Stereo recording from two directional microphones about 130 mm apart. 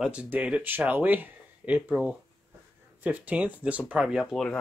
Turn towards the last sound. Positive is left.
turn(degrees=5)  # may be behind; listen again after turning